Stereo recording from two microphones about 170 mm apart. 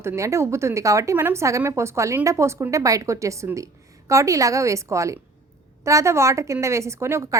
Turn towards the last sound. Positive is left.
turn(degrees=-15)  # may be behind; listen again after turning